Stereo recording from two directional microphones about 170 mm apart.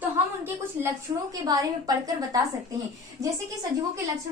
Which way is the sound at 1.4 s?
20° right (ahead or behind).